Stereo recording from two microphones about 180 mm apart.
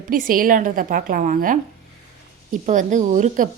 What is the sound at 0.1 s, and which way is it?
A woman's voice, 50° right (ahead or behind).